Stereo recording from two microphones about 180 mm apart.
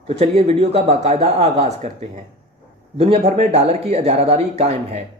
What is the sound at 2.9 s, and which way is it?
A man's voice, 35° right (ahead or behind).